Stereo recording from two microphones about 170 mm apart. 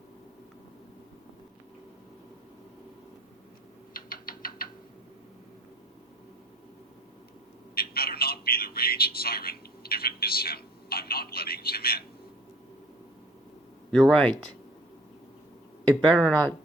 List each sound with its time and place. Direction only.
3.9 s rodents: 55° left (ahead or behind)
7.8 s a man's voice: 65° left (ahead or behind)
13.9 s speech: 5° left (ahead or behind)
15.8 s speech: 10° left (ahead or behind)